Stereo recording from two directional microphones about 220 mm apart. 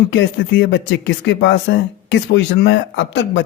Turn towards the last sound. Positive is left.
turn(degrees=55)  # may be behind; listen again after turning